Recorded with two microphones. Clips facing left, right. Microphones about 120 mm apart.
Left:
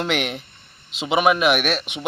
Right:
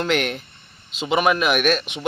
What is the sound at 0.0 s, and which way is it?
Speech, 15° left (ahead or behind).